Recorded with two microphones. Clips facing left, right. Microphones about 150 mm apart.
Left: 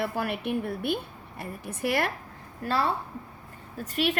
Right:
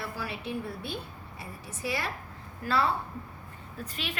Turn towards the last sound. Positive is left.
turn(degrees=45)  # may be behind; listen again after turning